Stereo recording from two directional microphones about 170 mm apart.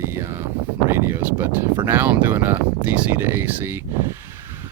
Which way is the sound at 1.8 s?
10° right (ahead or behind).